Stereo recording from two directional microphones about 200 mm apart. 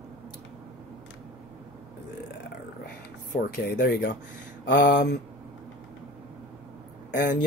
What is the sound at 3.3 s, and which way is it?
Speech, 45° left (ahead or behind).